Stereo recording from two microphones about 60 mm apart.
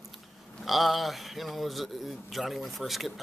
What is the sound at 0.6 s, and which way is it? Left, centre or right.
A man's voice, centre.